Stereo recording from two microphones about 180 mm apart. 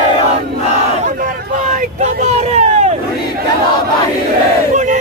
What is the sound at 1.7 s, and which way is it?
Vehicle, 40° right (ahead or behind).